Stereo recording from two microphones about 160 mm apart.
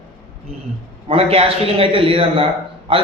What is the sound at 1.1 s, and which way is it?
Speech, 35° right (ahead or behind).